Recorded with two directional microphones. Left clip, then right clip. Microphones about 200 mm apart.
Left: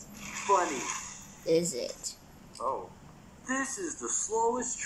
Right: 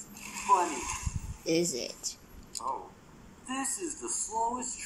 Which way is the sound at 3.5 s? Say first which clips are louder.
Left 3 dB; 10° right (ahead or behind).